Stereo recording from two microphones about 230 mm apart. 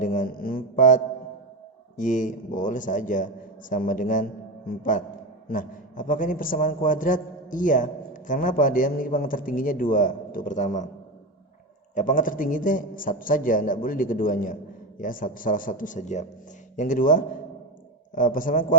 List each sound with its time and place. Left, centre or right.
0.0 s a man's voice: left
11.9 s a man's voice: left